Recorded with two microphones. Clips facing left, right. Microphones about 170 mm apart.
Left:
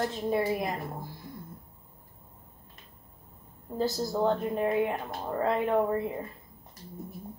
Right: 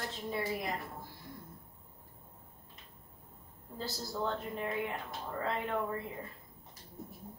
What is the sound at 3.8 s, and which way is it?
Speech, 45° left (ahead or behind).